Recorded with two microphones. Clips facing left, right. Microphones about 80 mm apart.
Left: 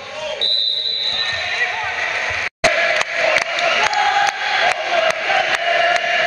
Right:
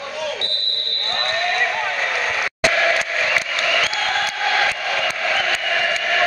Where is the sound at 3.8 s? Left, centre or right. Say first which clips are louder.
Left 7 dB; left.